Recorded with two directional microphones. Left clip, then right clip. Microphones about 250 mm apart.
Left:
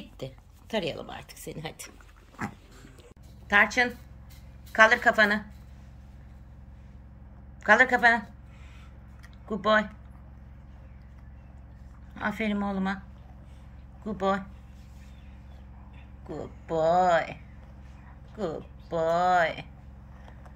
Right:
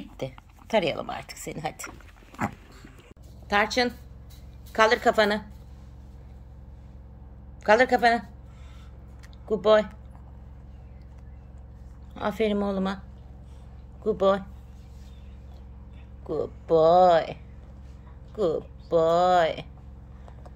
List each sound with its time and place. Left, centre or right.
0.2 s speech: centre
3.4 s a woman's voice: centre
7.6 s speech: centre
9.5 s speech: centre
12.1 s speech: centre
14.0 s speech: centre
16.3 s speech: centre
18.4 s speech: centre